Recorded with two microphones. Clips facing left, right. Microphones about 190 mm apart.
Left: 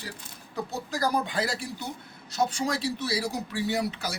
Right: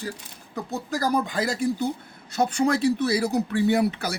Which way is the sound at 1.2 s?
45° right (ahead or behind).